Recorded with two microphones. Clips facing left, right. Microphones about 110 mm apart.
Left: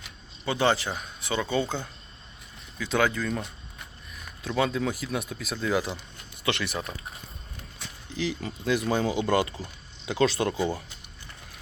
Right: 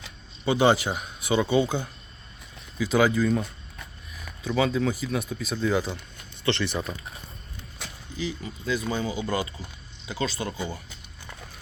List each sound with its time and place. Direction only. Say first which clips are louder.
0.4 s speech: right 4 dB; 15° right (ahead or behind); by 6.9 s centre (ahead or behind)
8.1 s speech: left 2 dB; 80° left
10.1 s speech: left 6 dB; 90° left